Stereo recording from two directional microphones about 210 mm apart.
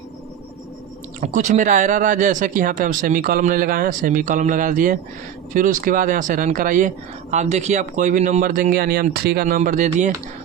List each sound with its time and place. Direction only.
1.2 s speech: 35° right (ahead or behind)